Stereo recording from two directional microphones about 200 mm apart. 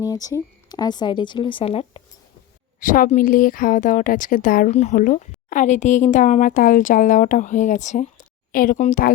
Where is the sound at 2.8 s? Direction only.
40° left (ahead or behind).